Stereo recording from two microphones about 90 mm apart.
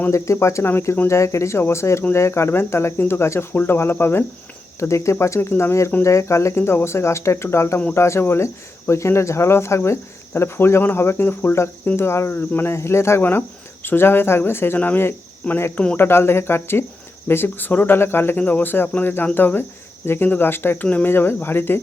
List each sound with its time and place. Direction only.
0.1 s speech: 35° left (ahead or behind)